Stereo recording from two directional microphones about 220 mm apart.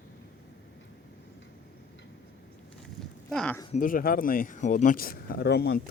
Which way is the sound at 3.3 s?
5° left (ahead or behind).